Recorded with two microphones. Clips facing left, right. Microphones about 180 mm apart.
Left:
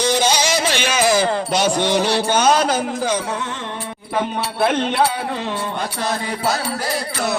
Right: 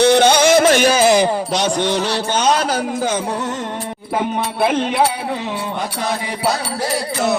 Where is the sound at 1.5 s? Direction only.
5° left (ahead or behind).